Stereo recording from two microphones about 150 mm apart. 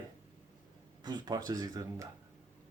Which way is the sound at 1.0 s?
30° right (ahead or behind).